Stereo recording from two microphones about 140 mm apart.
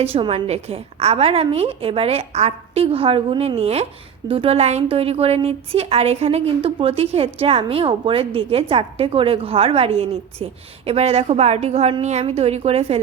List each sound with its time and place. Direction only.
0.0 s a woman's voice: 45° right (ahead or behind)